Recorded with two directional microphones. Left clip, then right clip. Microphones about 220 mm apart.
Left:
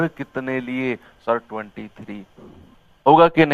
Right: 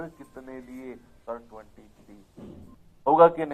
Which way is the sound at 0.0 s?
40° left (ahead or behind).